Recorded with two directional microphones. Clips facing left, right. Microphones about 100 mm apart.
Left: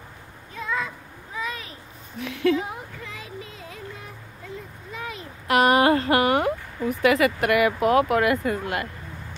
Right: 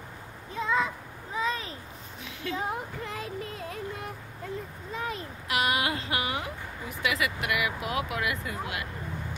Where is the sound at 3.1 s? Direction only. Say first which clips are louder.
Right 3 dB; 45° right (ahead or behind).